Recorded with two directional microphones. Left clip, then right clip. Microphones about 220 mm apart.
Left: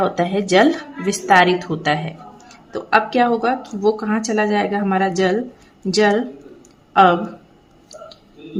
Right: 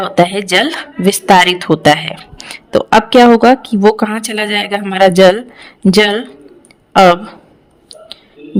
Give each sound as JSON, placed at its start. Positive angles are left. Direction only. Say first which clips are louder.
{"t": 0.0, "sound": "a woman's voice", "louder": "right 7 dB", "side_deg": -45}